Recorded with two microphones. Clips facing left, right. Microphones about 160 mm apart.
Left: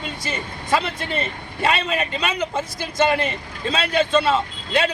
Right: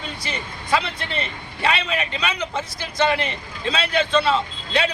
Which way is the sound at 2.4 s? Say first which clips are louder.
Left 3 dB; 5° left (ahead or behind).